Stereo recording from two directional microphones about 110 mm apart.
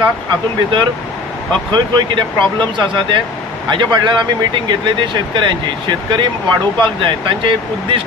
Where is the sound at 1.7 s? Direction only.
45° right (ahead or behind).